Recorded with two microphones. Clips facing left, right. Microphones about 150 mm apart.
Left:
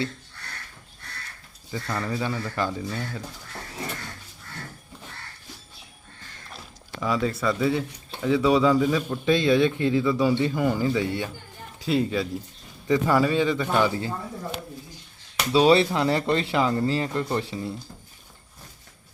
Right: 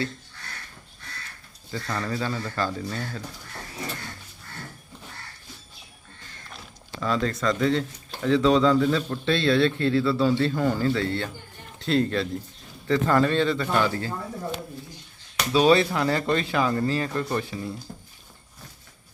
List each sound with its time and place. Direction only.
1.7 s speech: 5° left (ahead or behind)
2.0 s a man's voice: 15° left (ahead or behind)
7.0 s a man's voice: 10° left (ahead or behind)
15.5 s speech: 25° left (ahead or behind)